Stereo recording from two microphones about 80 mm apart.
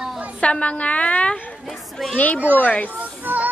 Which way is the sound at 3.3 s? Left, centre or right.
Right.